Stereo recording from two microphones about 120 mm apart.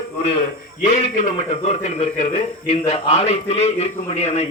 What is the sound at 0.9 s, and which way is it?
A man's voice, 70° left (ahead or behind).